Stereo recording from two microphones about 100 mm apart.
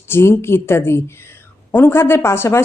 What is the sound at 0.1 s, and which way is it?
A woman's voice, 25° left (ahead or behind).